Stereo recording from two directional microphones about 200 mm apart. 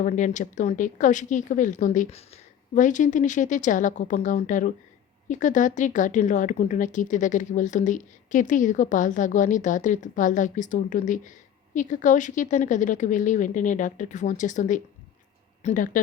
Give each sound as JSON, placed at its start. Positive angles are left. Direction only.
{"t": 0.0, "sound": "speech", "side_deg": 40}